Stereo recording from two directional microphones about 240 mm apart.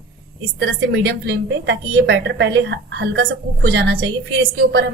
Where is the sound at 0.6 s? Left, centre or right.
Right.